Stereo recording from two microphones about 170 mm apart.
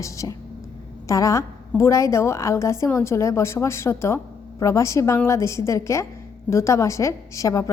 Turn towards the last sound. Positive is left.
turn(degrees=20)  # may be behind; listen again after turning